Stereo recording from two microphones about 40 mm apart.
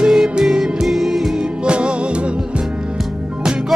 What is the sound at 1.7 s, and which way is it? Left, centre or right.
Music, right.